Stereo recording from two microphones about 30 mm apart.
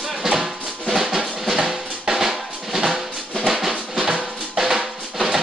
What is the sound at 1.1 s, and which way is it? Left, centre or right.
Drum, centre.